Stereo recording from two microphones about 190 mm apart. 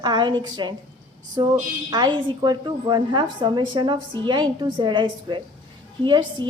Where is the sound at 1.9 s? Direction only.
20° right (ahead or behind).